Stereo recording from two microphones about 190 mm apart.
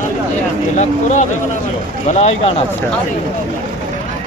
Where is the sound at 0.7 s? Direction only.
40° left (ahead or behind).